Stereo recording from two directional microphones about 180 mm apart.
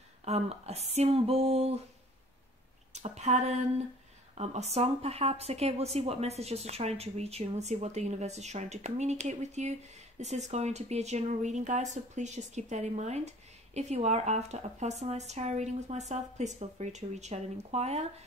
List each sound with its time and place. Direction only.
0.2 s speech: 35° right (ahead or behind)
2.9 s a woman's voice: 40° right (ahead or behind)